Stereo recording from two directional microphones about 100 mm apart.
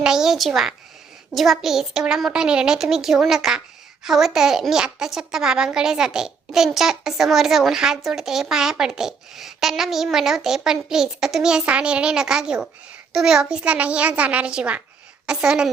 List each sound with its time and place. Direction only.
0.0 s a woman's voice: 5° right (ahead or behind)